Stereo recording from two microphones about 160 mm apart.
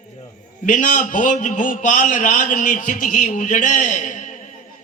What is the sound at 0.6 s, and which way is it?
A man's voice, 55° left (ahead or behind).